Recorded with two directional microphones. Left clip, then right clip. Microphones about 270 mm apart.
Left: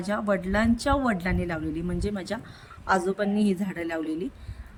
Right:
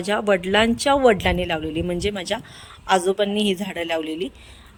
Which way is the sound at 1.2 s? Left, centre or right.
Centre.